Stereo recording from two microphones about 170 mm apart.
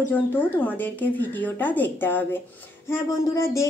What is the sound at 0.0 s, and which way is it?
Speech, 10° left (ahead or behind).